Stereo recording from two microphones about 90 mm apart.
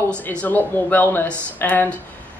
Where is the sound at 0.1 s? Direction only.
15° left (ahead or behind).